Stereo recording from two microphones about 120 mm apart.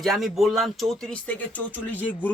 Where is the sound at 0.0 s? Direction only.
Centre (ahead or behind).